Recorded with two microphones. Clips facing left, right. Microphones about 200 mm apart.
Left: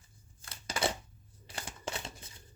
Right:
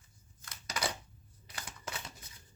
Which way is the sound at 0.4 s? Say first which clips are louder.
Left 4 dB; 30° left (ahead or behind).